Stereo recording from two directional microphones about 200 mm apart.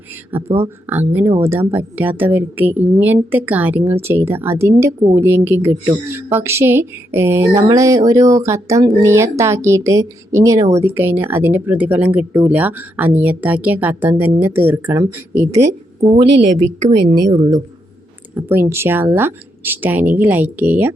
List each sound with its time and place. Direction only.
0.3 s speech: 10° right (ahead or behind)
16.2 s a woman's voice: 60° right (ahead or behind)
17.2 s a woman's voice: 20° right (ahead or behind)